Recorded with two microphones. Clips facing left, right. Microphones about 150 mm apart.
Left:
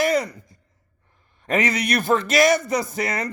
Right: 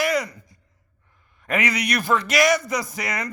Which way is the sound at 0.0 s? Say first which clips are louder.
Left 2 dB; 25° left (ahead or behind).